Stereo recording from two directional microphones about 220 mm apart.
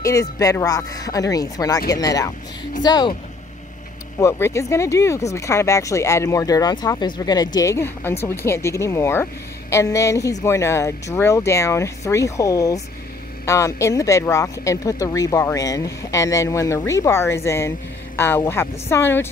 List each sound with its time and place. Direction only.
0.0 s speech: 15° left (ahead or behind)
4.2 s speech: 15° left (ahead or behind)